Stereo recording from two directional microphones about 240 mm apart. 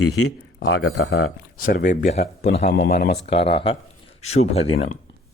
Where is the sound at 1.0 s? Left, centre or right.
Left.